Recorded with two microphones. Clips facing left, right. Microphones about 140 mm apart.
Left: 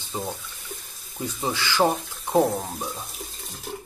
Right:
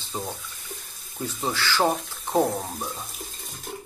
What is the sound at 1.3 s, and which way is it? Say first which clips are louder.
Speech: left 2 dB; 10° left (ahead or behind).